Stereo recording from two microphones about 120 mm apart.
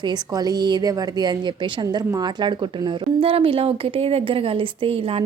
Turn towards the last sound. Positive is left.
turn(degrees=-50)  # may be behind; listen again after turning